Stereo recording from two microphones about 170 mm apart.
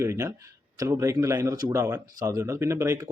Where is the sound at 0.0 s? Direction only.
15° right (ahead or behind).